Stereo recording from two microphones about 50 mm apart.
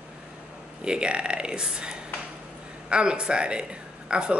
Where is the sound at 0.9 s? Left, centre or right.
Centre.